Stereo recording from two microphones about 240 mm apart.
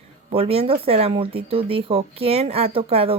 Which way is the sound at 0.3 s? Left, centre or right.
Right.